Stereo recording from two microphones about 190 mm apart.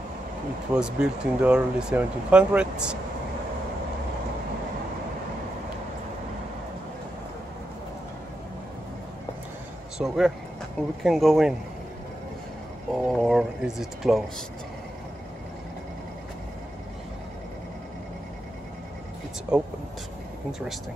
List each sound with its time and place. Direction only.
0.7 s speech: 5° right (ahead or behind)
9.9 s speech: centre (ahead or behind)
12.9 s speech: centre (ahead or behind)